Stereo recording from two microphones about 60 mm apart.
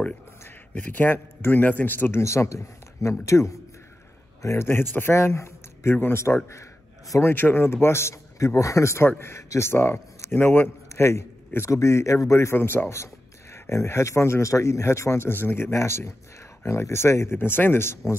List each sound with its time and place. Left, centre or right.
0.7 s a man's voice: left
4.6 s a man's voice: left
7.2 s a man's voice: left
10.9 s speech: left
12.5 s a man's voice: left
13.0 s speech: left
15.3 s speech: left
17.4 s a man's voice: left